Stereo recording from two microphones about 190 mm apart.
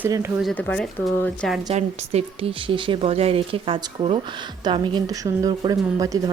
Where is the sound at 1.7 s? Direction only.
35° right (ahead or behind).